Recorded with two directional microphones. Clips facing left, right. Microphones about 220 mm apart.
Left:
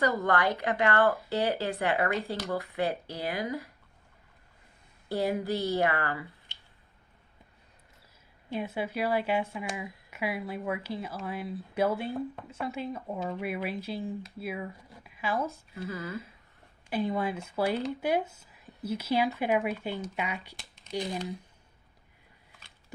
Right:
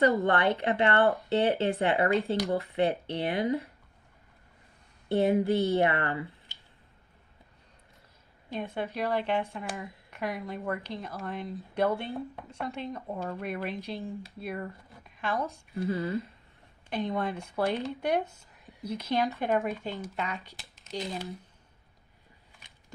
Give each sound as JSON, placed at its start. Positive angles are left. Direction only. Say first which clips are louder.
{"t": 0.0, "sound": "speech", "louder": "right 3 dB", "side_deg": -30}
{"t": 1.0, "sound": "speech", "louder": "right 1 dB", "side_deg": 0}
{"t": 1.3, "sound": "speech", "louder": "right 4 dB", "side_deg": -25}
{"t": 5.0, "sound": "speech", "louder": "right 5 dB", "side_deg": -25}
{"t": 8.5, "sound": "speech", "louder": "left 1 dB", "side_deg": 5}
{"t": 15.8, "sound": "speech", "louder": "right 6 dB", "side_deg": -30}
{"t": 16.9, "sound": "speech", "louder": "left 1 dB", "side_deg": 0}
{"t": 20.6, "sound": "a sound", "louder": "even", "side_deg": 0}